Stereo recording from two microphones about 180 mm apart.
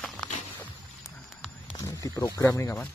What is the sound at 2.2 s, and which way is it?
Speech, 15° left (ahead or behind).